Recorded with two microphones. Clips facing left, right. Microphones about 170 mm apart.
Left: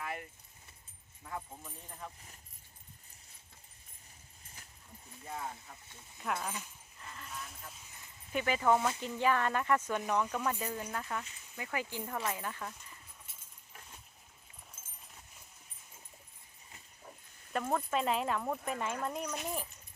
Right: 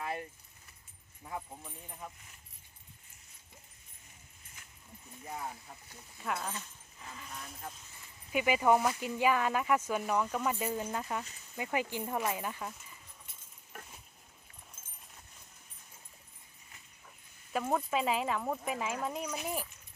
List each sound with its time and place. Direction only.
0.0 s keys jangling: 30° right (ahead or behind)
1.2 s speech: 15° right (ahead or behind)
4.6 s a sound: 35° left (ahead or behind)
6.1 s speech: centre (ahead or behind)
8.3 s speech: 10° right (ahead or behind)
13.7 s a sound: 60° right (ahead or behind)
17.5 s speech: 5° right (ahead or behind)